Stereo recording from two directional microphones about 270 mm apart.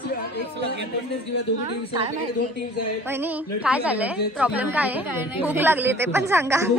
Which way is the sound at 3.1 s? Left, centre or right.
Centre.